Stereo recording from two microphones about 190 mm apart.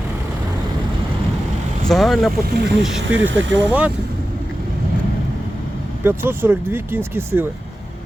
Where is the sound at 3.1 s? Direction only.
80° right.